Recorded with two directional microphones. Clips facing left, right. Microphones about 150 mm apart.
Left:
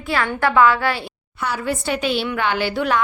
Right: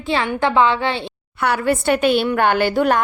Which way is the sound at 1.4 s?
60° right (ahead or behind).